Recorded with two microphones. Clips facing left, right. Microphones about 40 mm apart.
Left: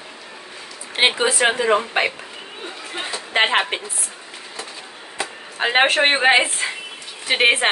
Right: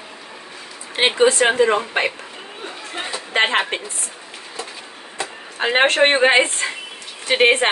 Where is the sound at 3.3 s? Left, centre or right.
Centre.